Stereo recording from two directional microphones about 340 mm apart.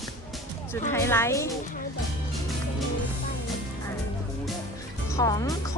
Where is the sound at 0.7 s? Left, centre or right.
Centre.